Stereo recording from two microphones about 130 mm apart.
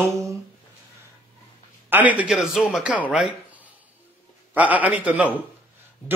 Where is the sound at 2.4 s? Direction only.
Centre (ahead or behind).